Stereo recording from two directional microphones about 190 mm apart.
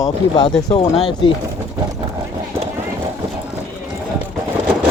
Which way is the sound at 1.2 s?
25° left (ahead or behind).